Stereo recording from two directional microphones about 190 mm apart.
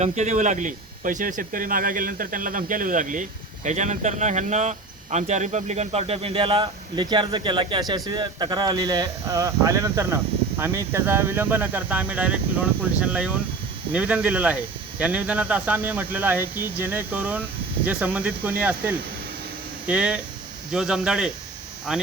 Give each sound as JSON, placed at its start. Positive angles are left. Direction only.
{"t": 0.0, "sound": "speech", "side_deg": -35}